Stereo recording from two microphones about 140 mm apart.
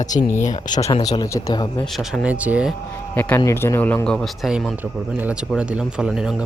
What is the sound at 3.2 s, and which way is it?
A man's voice, 15° left (ahead or behind).